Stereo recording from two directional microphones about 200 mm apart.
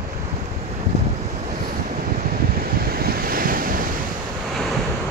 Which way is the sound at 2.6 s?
50° right (ahead or behind).